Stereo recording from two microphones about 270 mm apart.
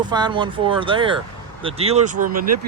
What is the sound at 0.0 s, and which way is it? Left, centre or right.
Speech, centre.